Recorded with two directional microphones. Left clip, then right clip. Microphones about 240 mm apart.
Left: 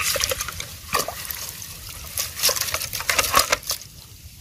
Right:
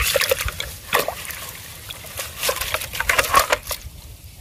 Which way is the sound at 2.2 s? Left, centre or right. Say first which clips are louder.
Left 1 dB; centre.